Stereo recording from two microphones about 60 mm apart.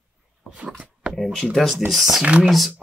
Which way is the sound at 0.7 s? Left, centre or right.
Centre.